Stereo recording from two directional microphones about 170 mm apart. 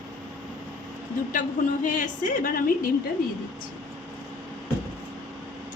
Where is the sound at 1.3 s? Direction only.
50° left (ahead or behind).